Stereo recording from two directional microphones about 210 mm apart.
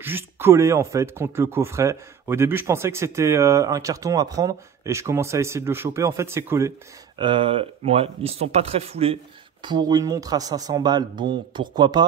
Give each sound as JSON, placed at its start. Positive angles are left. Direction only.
{"t": 0.0, "sound": "speech", "side_deg": -10}
{"t": 7.2, "sound": "speech", "side_deg": -25}